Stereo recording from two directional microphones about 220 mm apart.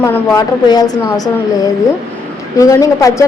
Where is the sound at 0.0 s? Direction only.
15° left (ahead or behind).